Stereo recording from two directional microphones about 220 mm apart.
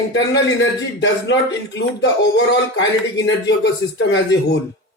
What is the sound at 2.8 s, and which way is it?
A man's voice, 55° left (ahead or behind).